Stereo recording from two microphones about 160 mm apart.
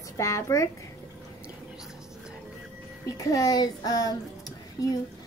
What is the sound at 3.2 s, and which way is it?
Speech, 20° left (ahead or behind).